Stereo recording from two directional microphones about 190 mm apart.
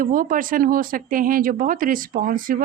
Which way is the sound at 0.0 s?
45° right (ahead or behind).